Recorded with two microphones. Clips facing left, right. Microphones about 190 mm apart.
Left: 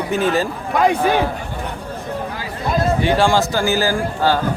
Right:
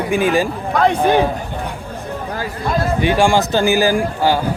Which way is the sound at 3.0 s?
15° right (ahead or behind).